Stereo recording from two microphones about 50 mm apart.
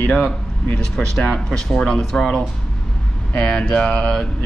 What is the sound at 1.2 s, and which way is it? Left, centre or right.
Speech, centre.